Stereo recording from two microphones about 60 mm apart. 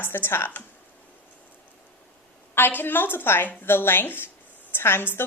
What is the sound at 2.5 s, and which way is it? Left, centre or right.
A woman's voice, left.